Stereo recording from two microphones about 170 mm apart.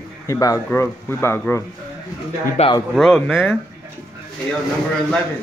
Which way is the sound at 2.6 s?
40° left (ahead or behind).